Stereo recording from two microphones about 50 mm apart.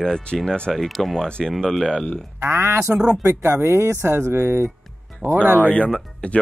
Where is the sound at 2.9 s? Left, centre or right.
Centre.